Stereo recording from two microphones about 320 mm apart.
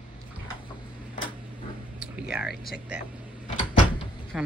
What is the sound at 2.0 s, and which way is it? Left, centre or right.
Speech, centre.